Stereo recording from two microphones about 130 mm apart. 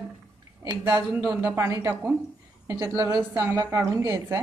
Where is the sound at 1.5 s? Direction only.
25° right (ahead or behind).